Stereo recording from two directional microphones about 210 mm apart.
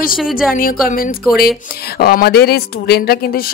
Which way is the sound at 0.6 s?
45° left (ahead or behind).